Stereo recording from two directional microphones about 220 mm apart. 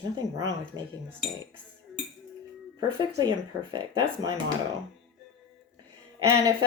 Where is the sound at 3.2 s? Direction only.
20° right (ahead or behind).